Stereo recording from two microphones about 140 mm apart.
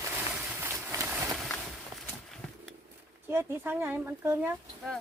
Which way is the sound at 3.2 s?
15° right (ahead or behind).